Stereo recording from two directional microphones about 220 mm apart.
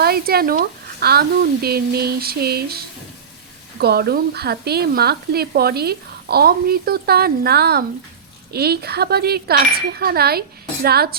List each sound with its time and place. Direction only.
0.0 s speech: 45° right (ahead or behind)